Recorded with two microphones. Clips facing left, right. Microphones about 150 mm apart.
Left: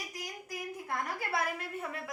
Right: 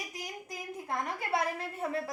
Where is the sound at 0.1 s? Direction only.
25° right (ahead or behind).